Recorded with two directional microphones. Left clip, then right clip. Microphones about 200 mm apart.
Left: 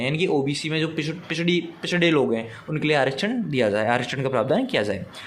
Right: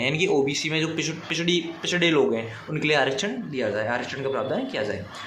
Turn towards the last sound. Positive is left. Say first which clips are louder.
# left 5 dB
turn(degrees=40)  # may be behind; listen again after turning